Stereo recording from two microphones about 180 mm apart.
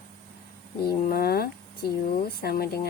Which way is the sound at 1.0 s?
60° left (ahead or behind).